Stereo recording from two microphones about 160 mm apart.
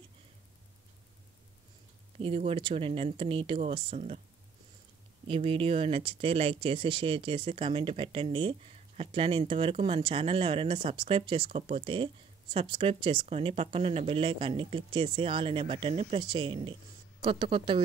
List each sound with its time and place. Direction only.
2.1 s speech: 40° right (ahead or behind)
5.2 s speech: 35° right (ahead or behind)